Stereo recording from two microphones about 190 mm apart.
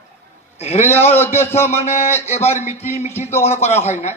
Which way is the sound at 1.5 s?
35° left (ahead or behind).